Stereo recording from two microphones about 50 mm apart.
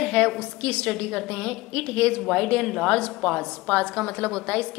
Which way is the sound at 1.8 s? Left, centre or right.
Left.